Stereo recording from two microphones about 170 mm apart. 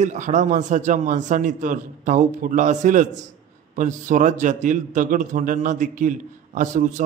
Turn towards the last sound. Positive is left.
turn(degrees=-45)  # may be behind; listen again after turning